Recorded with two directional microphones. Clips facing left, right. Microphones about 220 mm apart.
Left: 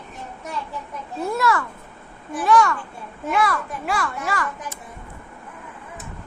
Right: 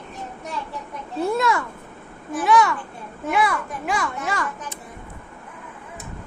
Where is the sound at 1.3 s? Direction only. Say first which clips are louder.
Even; 15° right (ahead or behind).